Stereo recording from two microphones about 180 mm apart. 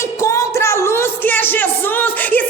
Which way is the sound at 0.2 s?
15° left (ahead or behind).